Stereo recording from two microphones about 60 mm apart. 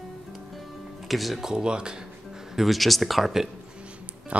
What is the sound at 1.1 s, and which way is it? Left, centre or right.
Speech, centre.